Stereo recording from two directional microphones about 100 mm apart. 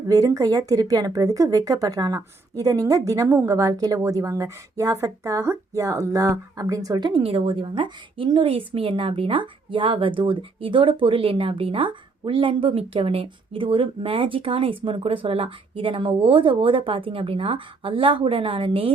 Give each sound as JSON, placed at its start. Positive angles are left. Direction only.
{"t": 0.1, "sound": "speech", "side_deg": -35}
{"t": 7.1, "sound": "a woman's voice", "side_deg": -70}